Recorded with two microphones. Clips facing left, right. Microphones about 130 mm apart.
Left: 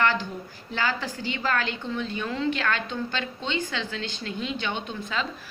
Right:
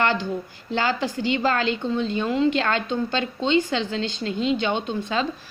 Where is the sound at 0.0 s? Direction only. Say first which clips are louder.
Right 2 dB; 25° right (ahead or behind).